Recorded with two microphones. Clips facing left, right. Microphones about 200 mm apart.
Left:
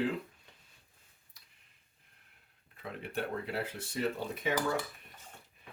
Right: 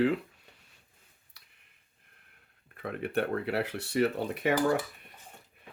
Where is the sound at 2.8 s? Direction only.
60° right (ahead or behind).